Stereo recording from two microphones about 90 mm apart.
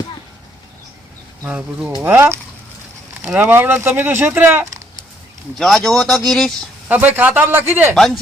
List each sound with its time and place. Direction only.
1.5 s speech: 10° right (ahead or behind)
2.0 s speech: 25° right (ahead or behind)
5.5 s speech: 5° left (ahead or behind)
6.8 s speech: 20° right (ahead or behind)
7.9 s speech: centre (ahead or behind)